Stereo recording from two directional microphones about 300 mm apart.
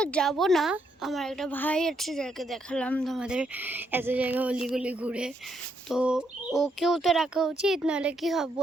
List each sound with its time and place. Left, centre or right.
0.0 s a woman's voice: centre